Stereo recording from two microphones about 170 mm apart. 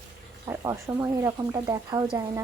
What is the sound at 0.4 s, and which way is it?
A woman's voice, 20° right (ahead or behind).